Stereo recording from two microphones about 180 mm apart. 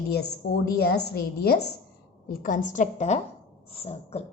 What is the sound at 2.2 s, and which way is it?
A woman's voice, 50° left (ahead or behind).